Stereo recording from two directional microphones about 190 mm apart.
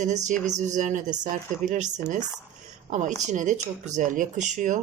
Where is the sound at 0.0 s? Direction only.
40° right (ahead or behind).